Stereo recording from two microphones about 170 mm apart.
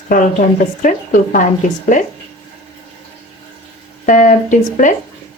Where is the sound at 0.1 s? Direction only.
50° left (ahead or behind).